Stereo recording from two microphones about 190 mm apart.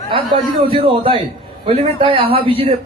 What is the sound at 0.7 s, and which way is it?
A man's voice, 30° right (ahead or behind).